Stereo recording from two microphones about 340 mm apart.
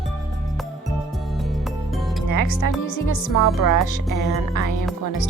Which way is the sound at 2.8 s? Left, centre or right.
Left.